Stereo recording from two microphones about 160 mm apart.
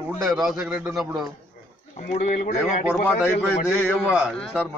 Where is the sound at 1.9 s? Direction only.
50° left (ahead or behind).